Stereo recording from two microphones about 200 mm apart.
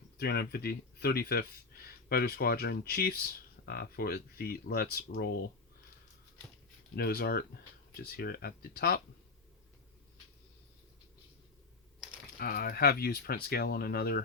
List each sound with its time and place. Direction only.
0.2 s speech: 50° left (ahead or behind)
6.9 s speech: 55° left (ahead or behind)
12.4 s speech: 50° left (ahead or behind)